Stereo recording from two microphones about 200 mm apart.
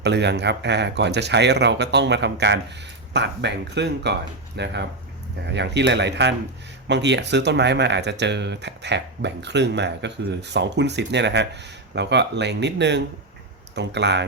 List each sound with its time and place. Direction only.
0.0 s speech: 60° right (ahead or behind)